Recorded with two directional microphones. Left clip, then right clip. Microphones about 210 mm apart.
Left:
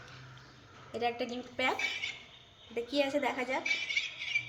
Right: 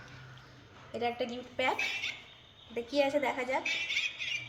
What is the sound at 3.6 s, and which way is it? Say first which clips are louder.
Squawk: even; 15° right (ahead or behind).